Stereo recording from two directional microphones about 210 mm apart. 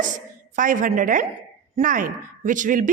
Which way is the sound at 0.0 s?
40° right (ahead or behind).